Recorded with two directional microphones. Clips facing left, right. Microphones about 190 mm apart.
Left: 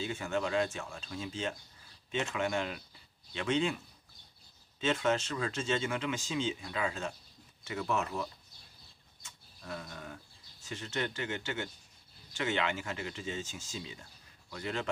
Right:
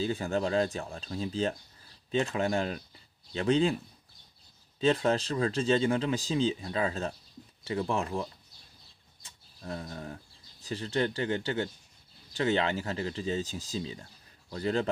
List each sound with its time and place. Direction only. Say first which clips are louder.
0.0 s speech: right 5 dB; 35° right (ahead or behind)
9.2 s a sound: right 5 dB; 35° right (ahead or behind)
10.6 s speech: right 7 dB; 35° right (ahead or behind)